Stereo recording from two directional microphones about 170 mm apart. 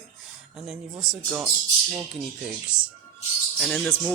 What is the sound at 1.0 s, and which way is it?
Speech, 5° right (ahead or behind).